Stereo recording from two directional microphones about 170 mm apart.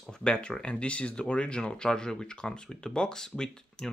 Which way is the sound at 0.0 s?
5° left (ahead or behind).